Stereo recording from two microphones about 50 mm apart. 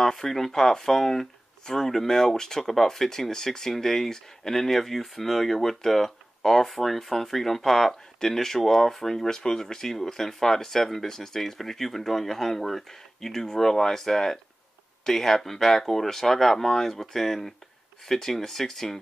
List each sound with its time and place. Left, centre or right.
0.0 s speech: centre